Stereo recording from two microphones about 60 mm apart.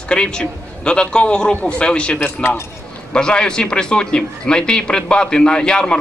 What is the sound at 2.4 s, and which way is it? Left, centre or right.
Speech, left.